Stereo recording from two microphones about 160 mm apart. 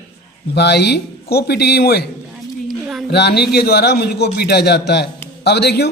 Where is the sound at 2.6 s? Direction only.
Centre (ahead or behind).